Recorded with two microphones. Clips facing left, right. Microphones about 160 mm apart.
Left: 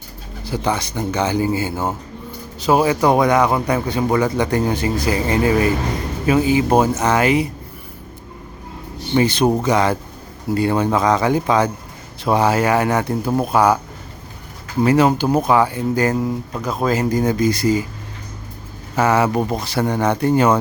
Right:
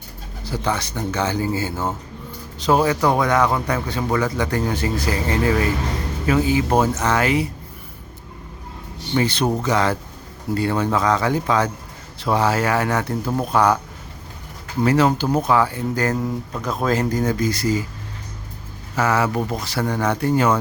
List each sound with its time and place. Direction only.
0.4 s speech: 15° left (ahead or behind)
9.1 s speech: 15° left (ahead or behind)
14.8 s speech: 15° left (ahead or behind)
18.9 s speech: 20° left (ahead or behind)